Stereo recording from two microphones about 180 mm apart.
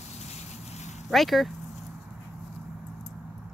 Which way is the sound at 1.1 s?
Centre (ahead or behind).